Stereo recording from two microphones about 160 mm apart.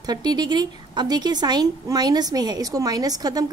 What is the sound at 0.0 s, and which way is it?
A woman's voice, 25° right (ahead or behind).